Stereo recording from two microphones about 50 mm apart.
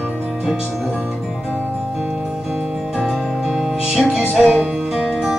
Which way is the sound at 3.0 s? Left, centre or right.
Centre.